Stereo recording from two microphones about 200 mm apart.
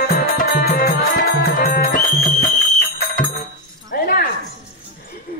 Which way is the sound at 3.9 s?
50° left (ahead or behind).